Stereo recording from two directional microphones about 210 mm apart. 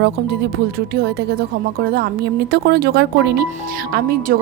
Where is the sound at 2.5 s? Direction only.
50° right (ahead or behind).